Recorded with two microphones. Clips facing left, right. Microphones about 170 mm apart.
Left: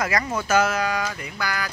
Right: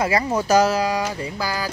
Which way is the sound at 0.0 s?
30° right (ahead or behind).